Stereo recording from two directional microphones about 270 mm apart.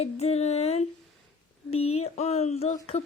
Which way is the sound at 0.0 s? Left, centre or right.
Left.